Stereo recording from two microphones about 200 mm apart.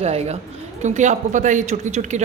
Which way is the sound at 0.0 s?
35° right (ahead or behind).